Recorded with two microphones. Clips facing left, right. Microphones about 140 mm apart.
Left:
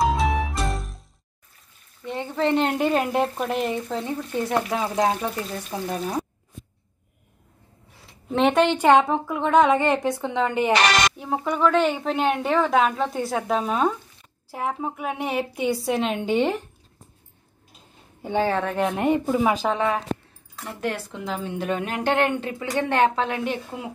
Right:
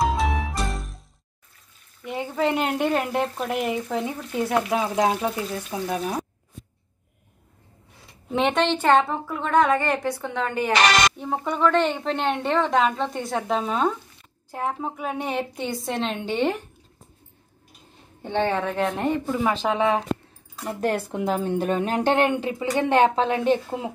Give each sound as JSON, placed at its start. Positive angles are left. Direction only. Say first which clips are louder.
{"t": 0.0, "sound": "music", "louder": "left 1 dB", "side_deg": 0}
{"t": 2.0, "sound": "speech", "louder": "left 1 dB", "side_deg": -10}
{"t": 8.1, "sound": "speech", "louder": "left 2 dB", "side_deg": 0}
{"t": 11.1, "sound": "speech", "louder": "left 1 dB", "side_deg": 0}
{"t": 18.2, "sound": "speech", "louder": "left 1 dB", "side_deg": 5}
{"t": 20.9, "sound": "speech", "louder": "right 6 dB", "side_deg": -50}